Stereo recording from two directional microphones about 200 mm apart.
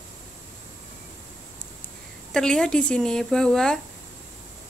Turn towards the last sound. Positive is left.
turn(degrees=5)  # may be behind; listen again after turning